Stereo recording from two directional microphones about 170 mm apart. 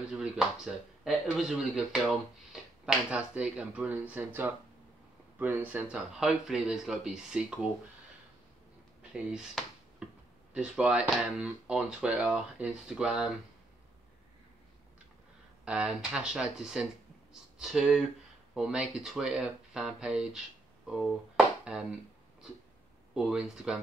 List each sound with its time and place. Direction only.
0.1 s speech: 5° right (ahead or behind)
9.1 s drawer open or close: 5° right (ahead or behind)
10.5 s speech: 5° right (ahead or behind)
15.6 s speech: 5° right (ahead or behind)
23.1 s speech: centre (ahead or behind)